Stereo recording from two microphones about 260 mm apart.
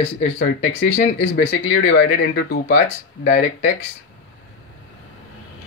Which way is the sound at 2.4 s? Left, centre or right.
Left.